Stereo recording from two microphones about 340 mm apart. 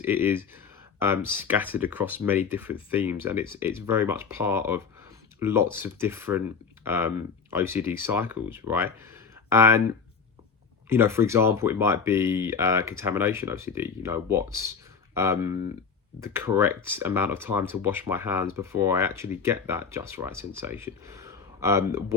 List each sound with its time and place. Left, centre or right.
0.0 s speech: centre
10.8 s speech: centre